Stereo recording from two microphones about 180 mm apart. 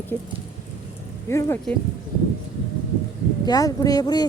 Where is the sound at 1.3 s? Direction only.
15° left (ahead or behind).